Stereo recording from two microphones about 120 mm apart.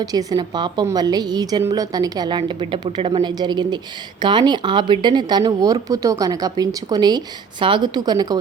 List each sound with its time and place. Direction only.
0.0 s speech: 30° right (ahead or behind)